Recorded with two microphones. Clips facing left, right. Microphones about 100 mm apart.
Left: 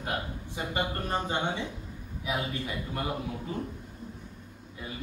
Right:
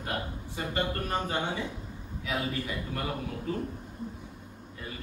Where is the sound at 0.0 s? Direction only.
20° left (ahead or behind).